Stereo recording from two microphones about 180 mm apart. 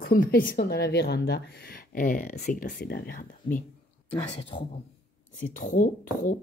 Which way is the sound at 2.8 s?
60° left (ahead or behind).